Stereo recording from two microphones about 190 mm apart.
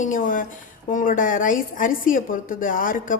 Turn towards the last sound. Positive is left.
turn(degrees=45)  # may be behind; listen again after turning